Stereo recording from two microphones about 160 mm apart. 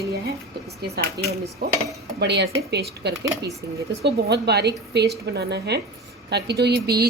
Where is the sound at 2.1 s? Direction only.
90° right.